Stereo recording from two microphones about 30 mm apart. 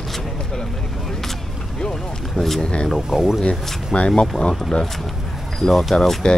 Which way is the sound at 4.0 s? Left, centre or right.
Left.